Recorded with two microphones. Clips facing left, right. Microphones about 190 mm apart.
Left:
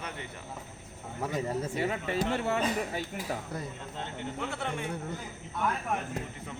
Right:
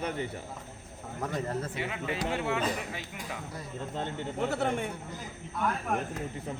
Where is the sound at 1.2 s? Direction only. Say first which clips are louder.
Left 1 dB; 10° left (ahead or behind).